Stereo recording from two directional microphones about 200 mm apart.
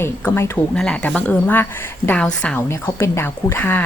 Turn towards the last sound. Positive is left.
turn(degrees=10)  # may be behind; listen again after turning